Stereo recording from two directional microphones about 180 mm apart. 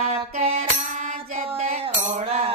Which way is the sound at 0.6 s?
45° right (ahead or behind).